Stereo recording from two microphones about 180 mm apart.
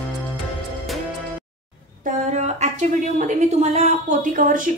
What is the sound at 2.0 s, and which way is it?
A woman's voice, 40° right (ahead or behind).